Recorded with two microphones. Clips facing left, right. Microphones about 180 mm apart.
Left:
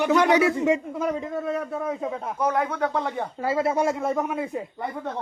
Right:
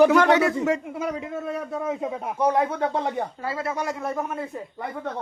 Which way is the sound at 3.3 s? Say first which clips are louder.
Left 6 dB; 25° left (ahead or behind).